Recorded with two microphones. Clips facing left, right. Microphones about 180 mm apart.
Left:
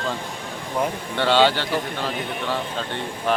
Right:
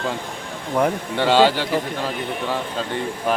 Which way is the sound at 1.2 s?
10° right (ahead or behind).